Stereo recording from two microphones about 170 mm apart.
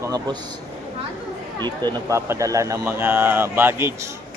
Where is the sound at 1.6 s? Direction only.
20° right (ahead or behind).